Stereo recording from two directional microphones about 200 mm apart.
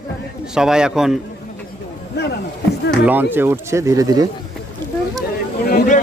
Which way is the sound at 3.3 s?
10° right (ahead or behind).